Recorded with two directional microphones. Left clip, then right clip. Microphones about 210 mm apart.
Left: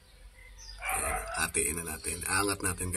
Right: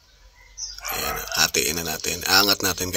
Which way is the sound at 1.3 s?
40° right (ahead or behind).